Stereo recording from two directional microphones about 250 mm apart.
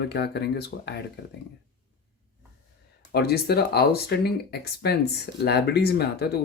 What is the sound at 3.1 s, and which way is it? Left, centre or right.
Speech, left.